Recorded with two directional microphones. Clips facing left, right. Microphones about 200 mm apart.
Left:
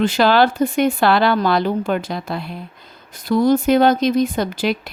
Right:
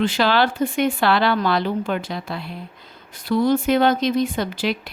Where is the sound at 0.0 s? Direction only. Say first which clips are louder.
Left 4 dB; 45° left (ahead or behind).